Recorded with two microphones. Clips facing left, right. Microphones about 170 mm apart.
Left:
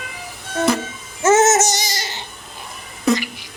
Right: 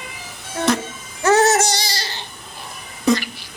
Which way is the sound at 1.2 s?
20° left (ahead or behind).